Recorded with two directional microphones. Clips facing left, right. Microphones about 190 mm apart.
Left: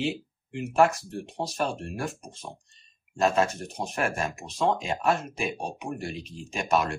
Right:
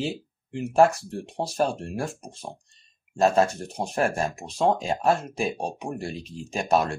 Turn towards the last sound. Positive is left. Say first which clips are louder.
# right 3 dB
turn(degrees=-35)  # may be behind; listen again after turning